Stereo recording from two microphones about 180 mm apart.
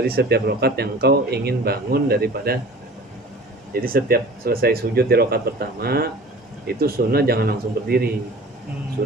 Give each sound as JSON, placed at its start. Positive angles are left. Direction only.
{"t": 0.1, "sound": "speech", "side_deg": -65}
{"t": 3.7, "sound": "speech", "side_deg": -55}